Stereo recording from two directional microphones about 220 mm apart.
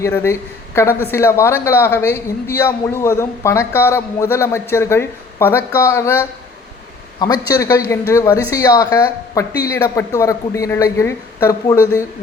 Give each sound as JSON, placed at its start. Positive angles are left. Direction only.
{"t": 0.0, "sound": "a man's voice", "side_deg": 10}